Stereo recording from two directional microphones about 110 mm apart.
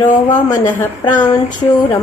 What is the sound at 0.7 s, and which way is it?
Speech, 15° left (ahead or behind).